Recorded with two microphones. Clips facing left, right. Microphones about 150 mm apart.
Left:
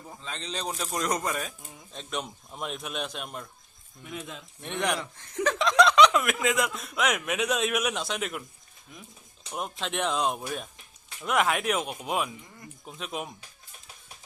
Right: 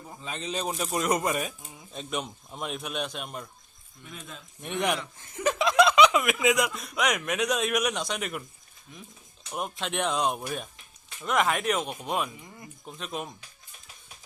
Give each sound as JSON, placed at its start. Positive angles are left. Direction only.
{"t": 0.2, "sound": "speech", "side_deg": -10}
{"t": 4.6, "sound": "speech", "side_deg": 0}
{"t": 9.5, "sound": "speech", "side_deg": 0}